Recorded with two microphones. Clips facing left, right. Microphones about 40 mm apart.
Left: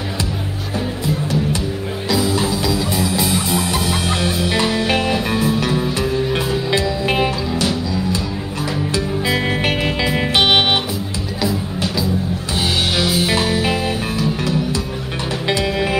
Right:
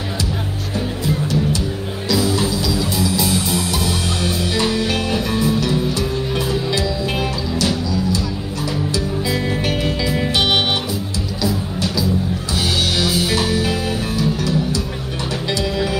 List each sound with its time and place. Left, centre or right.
2.0 s music: left
8.9 s music: left
12.5 s music: left
15.4 s music: left